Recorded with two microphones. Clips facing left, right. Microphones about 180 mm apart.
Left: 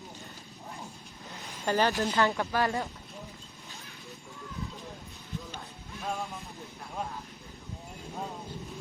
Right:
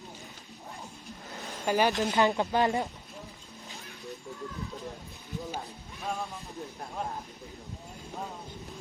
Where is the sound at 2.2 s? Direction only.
20° right (ahead or behind).